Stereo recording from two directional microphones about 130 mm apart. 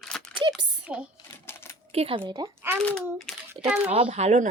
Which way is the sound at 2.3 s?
20° right (ahead or behind).